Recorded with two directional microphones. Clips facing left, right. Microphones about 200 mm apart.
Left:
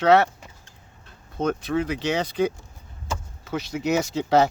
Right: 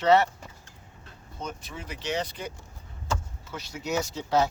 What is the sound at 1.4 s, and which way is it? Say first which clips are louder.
Speech: left 14 dB; 70° left (ahead or behind).